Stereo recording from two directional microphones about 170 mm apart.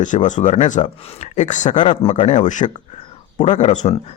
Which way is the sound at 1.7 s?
30° left (ahead or behind).